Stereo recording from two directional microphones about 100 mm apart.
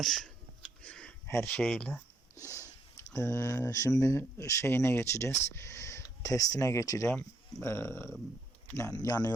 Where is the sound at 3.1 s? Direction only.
30° left (ahead or behind).